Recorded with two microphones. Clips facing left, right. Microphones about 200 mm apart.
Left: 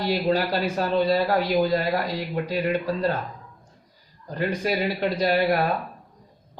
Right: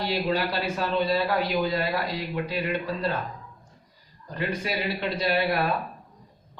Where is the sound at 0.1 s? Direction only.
40° left (ahead or behind).